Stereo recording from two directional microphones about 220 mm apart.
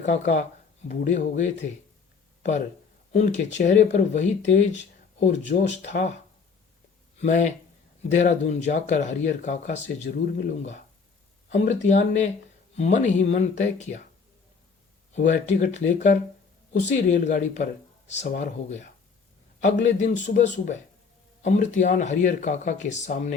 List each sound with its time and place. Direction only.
0.0 s speech: 30° left (ahead or behind)
7.2 s speech: 35° left (ahead or behind)
15.1 s speech: 35° left (ahead or behind)